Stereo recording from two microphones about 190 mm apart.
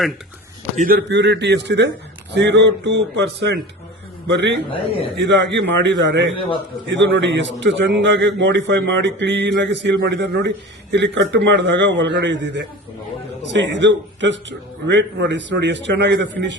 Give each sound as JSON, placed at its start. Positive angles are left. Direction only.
{"t": 0.8, "sound": "a man's voice", "side_deg": -50}
{"t": 4.3, "sound": "a man's voice", "side_deg": -70}
{"t": 4.7, "sound": "a man's voice", "side_deg": 30}
{"t": 5.1, "sound": "a man's voice", "side_deg": -70}